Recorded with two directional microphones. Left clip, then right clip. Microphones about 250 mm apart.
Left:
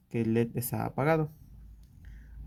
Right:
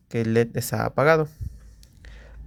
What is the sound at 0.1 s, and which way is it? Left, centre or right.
Speech, right.